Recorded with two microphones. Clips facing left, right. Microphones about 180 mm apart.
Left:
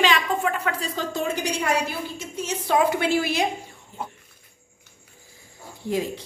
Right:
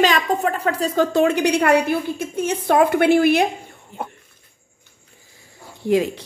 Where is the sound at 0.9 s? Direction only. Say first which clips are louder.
Right 10 dB; 60° right (ahead or behind).